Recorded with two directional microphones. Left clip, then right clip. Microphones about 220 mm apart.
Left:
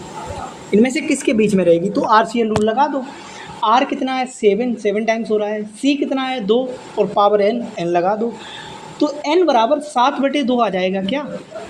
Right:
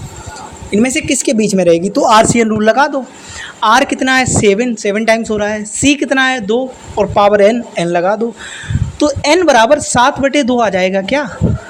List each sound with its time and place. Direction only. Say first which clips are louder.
0.7 s a woman's voice: right 2 dB; 30° right (ahead or behind)
7.0 s a woman's voice: right 5 dB; 25° right (ahead or behind)